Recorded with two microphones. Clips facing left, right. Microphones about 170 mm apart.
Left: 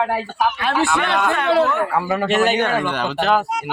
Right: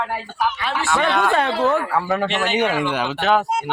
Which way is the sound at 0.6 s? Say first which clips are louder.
Left 5 dB; 55° left (ahead or behind).